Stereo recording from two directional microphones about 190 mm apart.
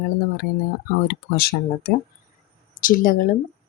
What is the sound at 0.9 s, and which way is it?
A woman's voice, 50° left (ahead or behind).